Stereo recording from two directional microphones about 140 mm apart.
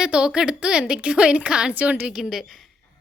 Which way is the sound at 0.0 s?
5° right (ahead or behind).